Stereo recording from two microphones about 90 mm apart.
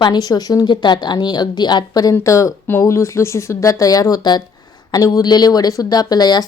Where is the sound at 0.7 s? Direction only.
55° left (ahead or behind).